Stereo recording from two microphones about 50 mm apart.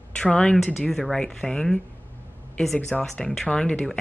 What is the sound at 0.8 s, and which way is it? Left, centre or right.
Speech, centre.